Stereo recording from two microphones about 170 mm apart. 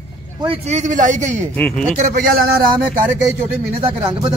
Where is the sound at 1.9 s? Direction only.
50° right (ahead or behind).